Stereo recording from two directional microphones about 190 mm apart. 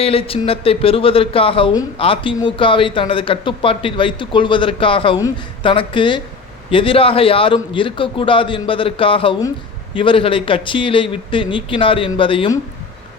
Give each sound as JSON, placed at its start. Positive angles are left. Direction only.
{"t": 0.0, "sound": "speech", "side_deg": 30}